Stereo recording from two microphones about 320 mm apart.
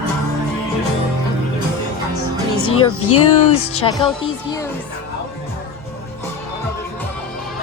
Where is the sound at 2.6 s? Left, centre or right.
Left.